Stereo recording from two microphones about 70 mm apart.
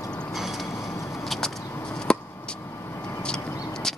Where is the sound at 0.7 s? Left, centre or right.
Left.